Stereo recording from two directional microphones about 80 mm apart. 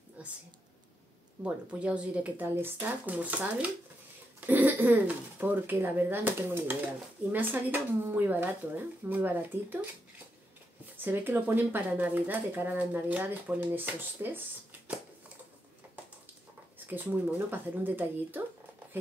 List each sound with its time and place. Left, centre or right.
0.2 s a sound: centre
1.4 s speech: centre
11.0 s speech: right
16.7 s speech: right